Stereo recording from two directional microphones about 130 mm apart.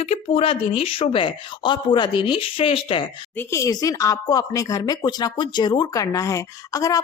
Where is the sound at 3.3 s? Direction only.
25° left (ahead or behind).